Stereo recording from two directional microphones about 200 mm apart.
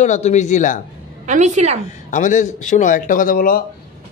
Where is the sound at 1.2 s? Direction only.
35° right (ahead or behind).